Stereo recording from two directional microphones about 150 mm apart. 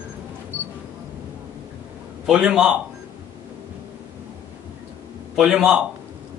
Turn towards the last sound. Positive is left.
turn(degrees=-5)  # may be behind; listen again after turning